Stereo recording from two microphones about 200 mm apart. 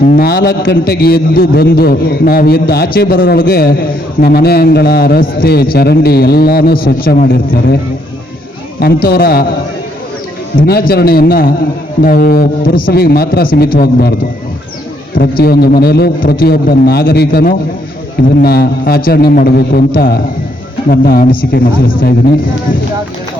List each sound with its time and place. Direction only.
0.1 s a man's voice: 50° left (ahead or behind)
8.8 s a man's voice: 50° left (ahead or behind)
10.6 s a man's voice: 50° left (ahead or behind)
15.1 s a man's voice: 50° left (ahead or behind)